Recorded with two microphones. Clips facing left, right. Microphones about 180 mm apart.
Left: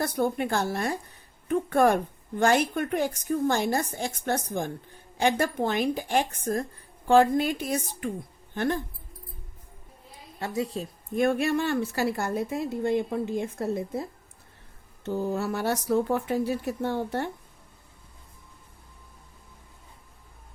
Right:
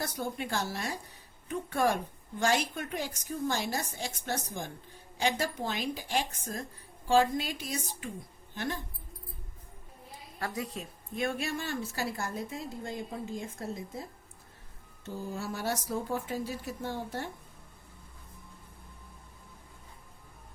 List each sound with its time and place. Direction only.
0.0 s a woman's voice: 55° left (ahead or behind)
10.4 s a woman's voice: 25° left (ahead or behind)
11.1 s a woman's voice: 55° left (ahead or behind)